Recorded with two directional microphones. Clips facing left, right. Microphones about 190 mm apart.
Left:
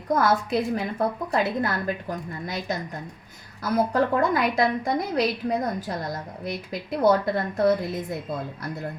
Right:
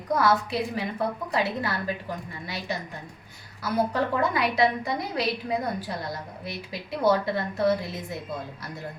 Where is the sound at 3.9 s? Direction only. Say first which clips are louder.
Left 4 dB; 45° left (ahead or behind).